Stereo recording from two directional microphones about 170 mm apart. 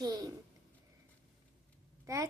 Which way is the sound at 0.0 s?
25° right (ahead or behind).